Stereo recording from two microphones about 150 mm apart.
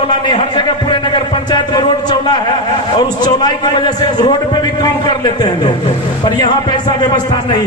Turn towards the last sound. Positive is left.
turn(degrees=30)  # may be behind; listen again after turning